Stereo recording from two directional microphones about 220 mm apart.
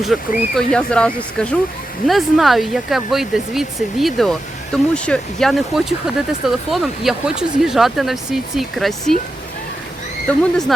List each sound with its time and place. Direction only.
0.0 s speech: centre (ahead or behind)